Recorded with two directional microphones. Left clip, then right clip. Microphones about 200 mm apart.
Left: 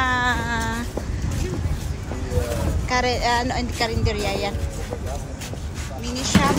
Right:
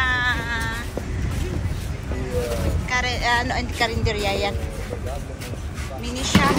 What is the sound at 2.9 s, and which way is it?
Speech, 25° left (ahead or behind).